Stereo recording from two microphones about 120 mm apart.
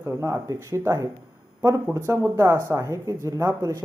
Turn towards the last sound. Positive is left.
turn(degrees=-25)  # may be behind; listen again after turning